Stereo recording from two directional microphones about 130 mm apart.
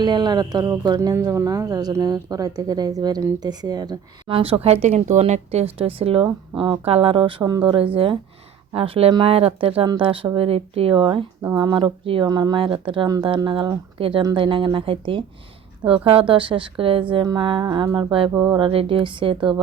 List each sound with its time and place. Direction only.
0.0 s a woman's voice: 35° right (ahead or behind)